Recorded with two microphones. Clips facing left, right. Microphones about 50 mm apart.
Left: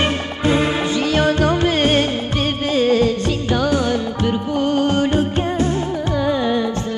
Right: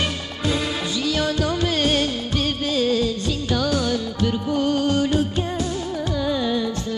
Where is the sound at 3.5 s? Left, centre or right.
Left.